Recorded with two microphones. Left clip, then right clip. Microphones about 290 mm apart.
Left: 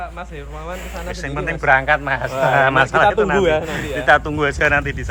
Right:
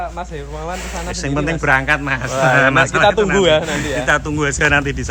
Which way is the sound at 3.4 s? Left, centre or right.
Right.